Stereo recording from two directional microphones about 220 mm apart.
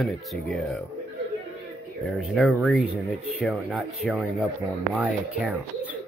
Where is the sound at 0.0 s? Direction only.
Centre (ahead or behind).